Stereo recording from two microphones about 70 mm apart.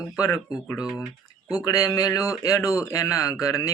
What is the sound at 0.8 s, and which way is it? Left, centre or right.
Speech, centre.